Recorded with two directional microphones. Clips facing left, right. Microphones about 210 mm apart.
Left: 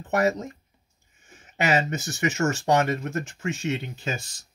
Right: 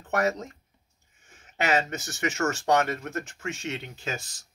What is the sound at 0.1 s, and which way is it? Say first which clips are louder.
Speech: left 3 dB; 10° left (ahead or behind).